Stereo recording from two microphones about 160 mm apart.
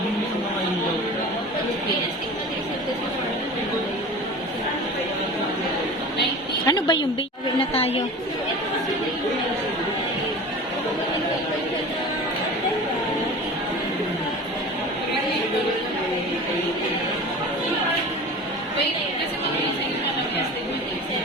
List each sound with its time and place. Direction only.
6.7 s a woman's voice: 25° left (ahead or behind)
7.6 s a woman's voice: 40° left (ahead or behind)